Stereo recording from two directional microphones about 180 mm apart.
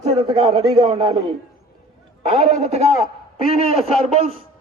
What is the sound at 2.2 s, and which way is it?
Speech, 35° right (ahead or behind).